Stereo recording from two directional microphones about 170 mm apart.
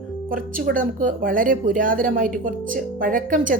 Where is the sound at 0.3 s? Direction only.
55° right (ahead or behind).